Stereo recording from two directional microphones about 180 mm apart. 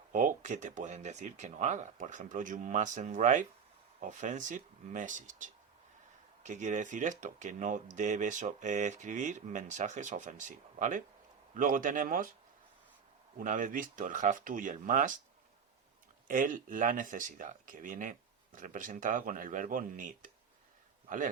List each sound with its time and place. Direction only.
0.1 s speech: 45° right (ahead or behind)
13.4 s speech: 50° right (ahead or behind)
16.2 s speech: 45° right (ahead or behind)